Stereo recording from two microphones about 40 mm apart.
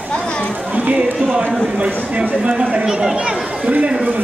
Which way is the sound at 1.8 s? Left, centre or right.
Right.